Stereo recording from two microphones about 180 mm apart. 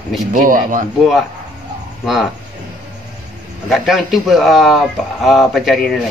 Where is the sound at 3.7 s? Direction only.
Centre (ahead or behind).